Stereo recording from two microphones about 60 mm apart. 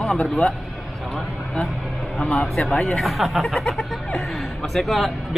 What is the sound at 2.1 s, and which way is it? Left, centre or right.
Speech, centre.